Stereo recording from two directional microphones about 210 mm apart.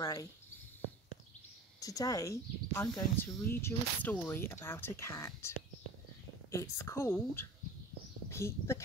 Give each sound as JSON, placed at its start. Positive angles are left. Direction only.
{"t": 0.0, "sound": "cricket", "side_deg": 15}
{"t": 1.8, "sound": "speech", "side_deg": 15}